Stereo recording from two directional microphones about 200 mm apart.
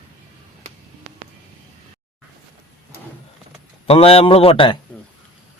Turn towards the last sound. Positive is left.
turn(degrees=25)  # may be behind; listen again after turning